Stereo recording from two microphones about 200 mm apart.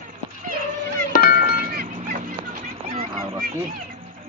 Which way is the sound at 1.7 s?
45° right (ahead or behind).